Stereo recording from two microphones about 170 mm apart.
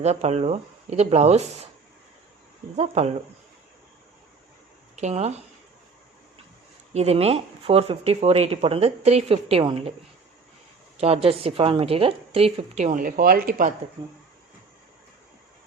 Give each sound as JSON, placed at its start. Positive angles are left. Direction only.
{"t": 0.0, "sound": "speech", "side_deg": -40}
{"t": 2.7, "sound": "speech", "side_deg": -40}
{"t": 4.9, "sound": "speech", "side_deg": -40}
{"t": 6.9, "sound": "speech", "side_deg": -35}
{"t": 10.9, "sound": "speech", "side_deg": -35}